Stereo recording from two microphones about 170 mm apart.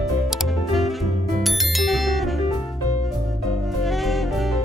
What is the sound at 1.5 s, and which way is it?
Bicycle bell, centre (ahead or behind).